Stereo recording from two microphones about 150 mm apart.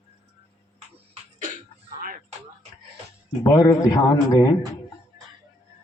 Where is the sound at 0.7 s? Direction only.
50° right (ahead or behind).